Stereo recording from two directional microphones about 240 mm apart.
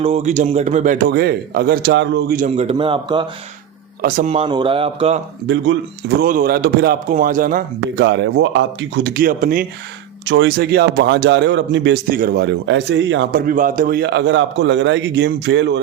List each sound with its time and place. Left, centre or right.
0.0 s a man's voice: right
5.5 s a man's voice: right
6.2 s a man's voice: right
9.0 s a man's voice: right
10.2 s a man's voice: right